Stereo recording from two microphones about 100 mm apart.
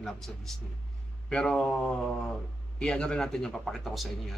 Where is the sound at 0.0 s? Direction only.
5° left (ahead or behind).